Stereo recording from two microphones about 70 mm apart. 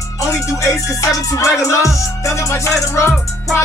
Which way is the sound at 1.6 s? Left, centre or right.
Left.